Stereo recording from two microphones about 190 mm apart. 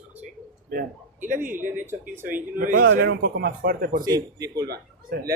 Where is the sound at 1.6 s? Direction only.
45° right (ahead or behind).